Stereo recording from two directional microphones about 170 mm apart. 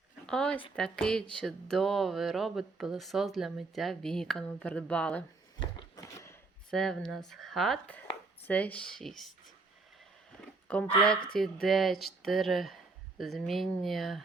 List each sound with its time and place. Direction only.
0.3 s speech: 5° left (ahead or behind)
5.5 s a sound: 20° left (ahead or behind)
6.7 s speech: 5° left (ahead or behind)
10.7 s speech: 5° left (ahead or behind)